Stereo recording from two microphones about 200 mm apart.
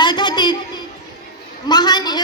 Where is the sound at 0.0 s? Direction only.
20° left (ahead or behind).